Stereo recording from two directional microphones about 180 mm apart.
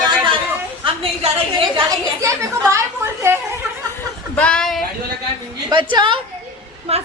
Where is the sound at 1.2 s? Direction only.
30° right (ahead or behind).